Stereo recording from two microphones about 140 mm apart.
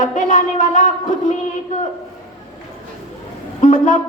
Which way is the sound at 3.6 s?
60° left (ahead or behind).